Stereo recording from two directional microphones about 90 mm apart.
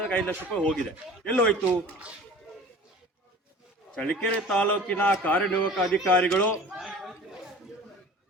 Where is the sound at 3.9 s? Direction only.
10° left (ahead or behind).